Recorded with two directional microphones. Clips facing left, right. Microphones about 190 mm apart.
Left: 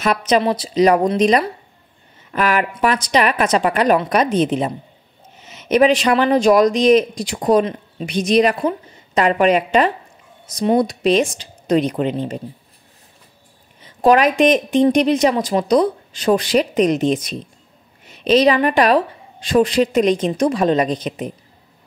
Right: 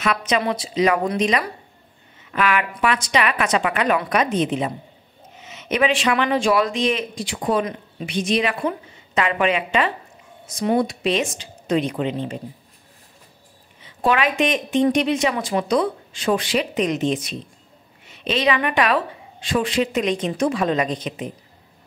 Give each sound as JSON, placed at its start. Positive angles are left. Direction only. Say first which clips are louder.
{"t": 0.4, "sound": "a woman's voice", "louder": "left 5 dB", "side_deg": 35}
{"t": 2.3, "sound": "a woman's voice", "louder": "left 3 dB", "side_deg": 40}
{"t": 13.7, "sound": "a woman's voice", "louder": "left 7 dB", "side_deg": 40}